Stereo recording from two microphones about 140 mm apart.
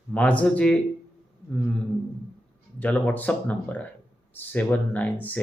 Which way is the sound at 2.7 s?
10° left (ahead or behind).